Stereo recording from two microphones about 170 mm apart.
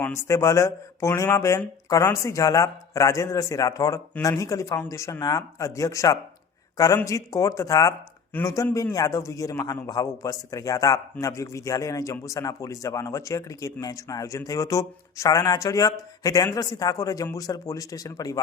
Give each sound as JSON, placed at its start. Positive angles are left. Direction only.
{"t": 0.0, "sound": "speech", "side_deg": 15}